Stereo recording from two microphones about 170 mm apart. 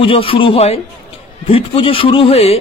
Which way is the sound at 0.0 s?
30° left (ahead or behind).